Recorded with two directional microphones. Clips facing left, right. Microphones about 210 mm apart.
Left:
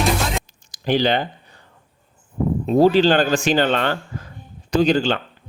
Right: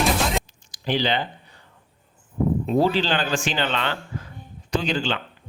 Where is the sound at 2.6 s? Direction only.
45° left (ahead or behind).